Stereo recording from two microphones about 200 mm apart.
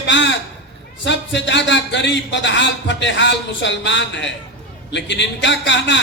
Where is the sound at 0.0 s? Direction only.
60° left (ahead or behind).